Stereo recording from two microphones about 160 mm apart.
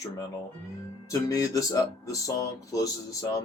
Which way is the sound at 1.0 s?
20° left (ahead or behind).